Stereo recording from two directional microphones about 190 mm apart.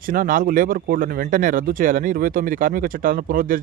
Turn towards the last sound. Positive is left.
turn(degrees=-45)  # may be behind; listen again after turning